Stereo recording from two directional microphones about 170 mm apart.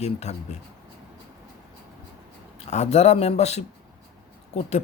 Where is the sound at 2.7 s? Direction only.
40° left (ahead or behind).